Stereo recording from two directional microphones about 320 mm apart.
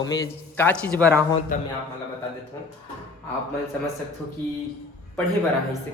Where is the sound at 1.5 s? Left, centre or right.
Left.